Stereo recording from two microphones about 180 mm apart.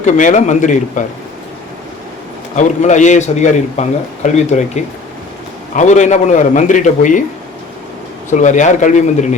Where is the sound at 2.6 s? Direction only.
40° left (ahead or behind).